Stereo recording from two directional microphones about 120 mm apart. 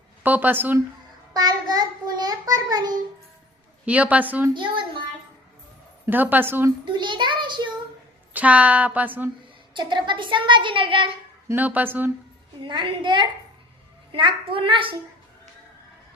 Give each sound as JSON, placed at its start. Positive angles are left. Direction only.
{"t": 0.2, "sound": "a woman's voice", "side_deg": -15}
{"t": 1.3, "sound": "a child's voice", "side_deg": -35}
{"t": 3.8, "sound": "a woman's voice", "side_deg": -10}
{"t": 4.5, "sound": "speech", "side_deg": -45}
{"t": 6.1, "sound": "a woman's voice", "side_deg": -15}
{"t": 6.8, "sound": "a child's voice", "side_deg": -40}
{"t": 8.3, "sound": "a woman's voice", "side_deg": -10}
{"t": 9.7, "sound": "speech", "side_deg": -40}
{"t": 11.4, "sound": "a woman's voice", "side_deg": -15}
{"t": 12.6, "sound": "a child's voice", "side_deg": -40}